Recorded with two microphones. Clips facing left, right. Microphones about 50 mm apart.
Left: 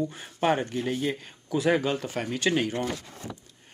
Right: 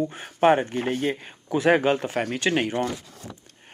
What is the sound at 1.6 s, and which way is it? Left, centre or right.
Speech, right.